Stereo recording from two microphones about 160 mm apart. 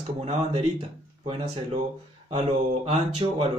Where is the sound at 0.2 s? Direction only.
40° right (ahead or behind).